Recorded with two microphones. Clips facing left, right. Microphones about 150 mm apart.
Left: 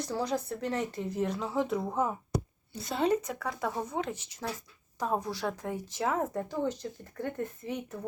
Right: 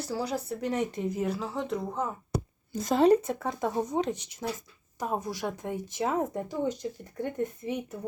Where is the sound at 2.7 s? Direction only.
45° right (ahead or behind).